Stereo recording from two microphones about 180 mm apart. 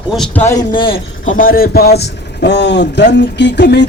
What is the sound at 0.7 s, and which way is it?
Speech, 30° left (ahead or behind).